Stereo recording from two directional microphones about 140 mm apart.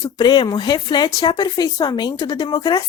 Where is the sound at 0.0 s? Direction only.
30° left (ahead or behind).